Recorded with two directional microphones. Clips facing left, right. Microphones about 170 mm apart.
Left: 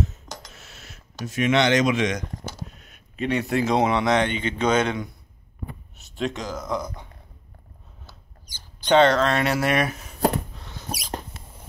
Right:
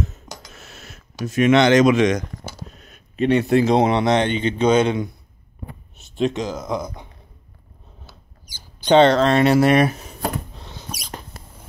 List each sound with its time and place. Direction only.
0.6 s a sound: 50° right (ahead or behind)
1.2 s speech: 50° right (ahead or behind)
2.9 s speech: 30° right (ahead or behind)
6.1 s speech: 20° right (ahead or behind)
8.1 s rodents: 10° right (ahead or behind)
8.9 s speech: 25° right (ahead or behind)
10.5 s rodents: 25° right (ahead or behind)